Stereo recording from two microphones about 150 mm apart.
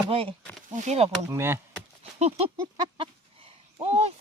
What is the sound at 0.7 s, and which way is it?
Speech, 50° right (ahead or behind).